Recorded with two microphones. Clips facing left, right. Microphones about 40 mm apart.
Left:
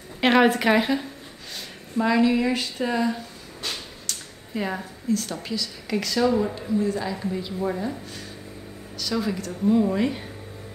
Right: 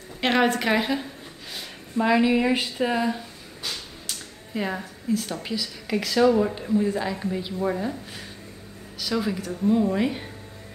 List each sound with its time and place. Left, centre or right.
0.2 s speech: centre
2.0 s speech: centre
4.1 s speech: centre
9.9 s speech: centre